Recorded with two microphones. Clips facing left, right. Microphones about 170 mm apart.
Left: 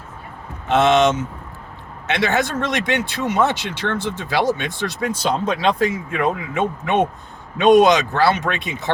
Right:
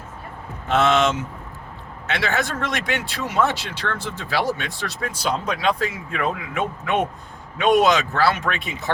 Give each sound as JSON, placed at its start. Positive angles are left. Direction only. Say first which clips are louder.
{"t": 0.7, "sound": "speech", "louder": "left 4 dB", "side_deg": 20}